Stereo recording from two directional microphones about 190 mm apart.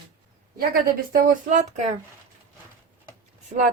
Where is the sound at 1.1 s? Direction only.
40° right (ahead or behind).